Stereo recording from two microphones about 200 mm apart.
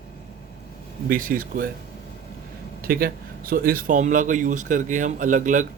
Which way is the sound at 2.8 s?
50° right (ahead or behind).